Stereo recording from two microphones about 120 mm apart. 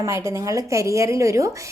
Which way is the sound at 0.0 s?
25° right (ahead or behind).